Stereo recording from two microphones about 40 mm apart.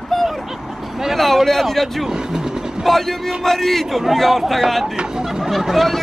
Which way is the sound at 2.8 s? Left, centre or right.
Centre.